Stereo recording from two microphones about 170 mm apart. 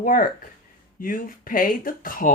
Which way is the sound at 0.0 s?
55° left (ahead or behind).